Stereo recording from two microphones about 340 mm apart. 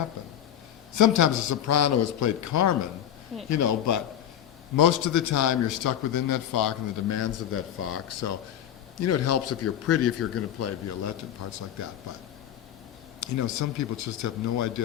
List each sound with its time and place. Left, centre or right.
0.9 s a man's voice: left
7.2 s a man's voice: left
13.1 s a man's voice: left